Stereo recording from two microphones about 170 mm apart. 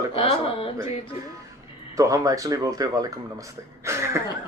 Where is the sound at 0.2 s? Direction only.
35° left (ahead or behind).